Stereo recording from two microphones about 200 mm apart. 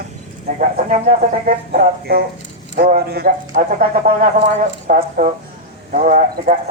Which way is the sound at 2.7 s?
50° right (ahead or behind).